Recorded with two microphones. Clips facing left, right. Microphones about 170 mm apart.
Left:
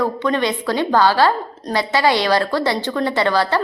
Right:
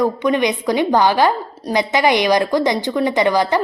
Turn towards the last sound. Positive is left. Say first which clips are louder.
# right 2 dB
turn(degrees=-15)  # may be behind; listen again after turning